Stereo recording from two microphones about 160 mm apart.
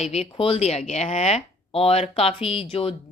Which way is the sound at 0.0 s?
40° left (ahead or behind).